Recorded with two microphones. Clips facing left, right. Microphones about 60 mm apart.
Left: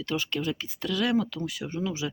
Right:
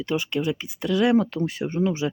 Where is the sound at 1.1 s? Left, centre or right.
Right.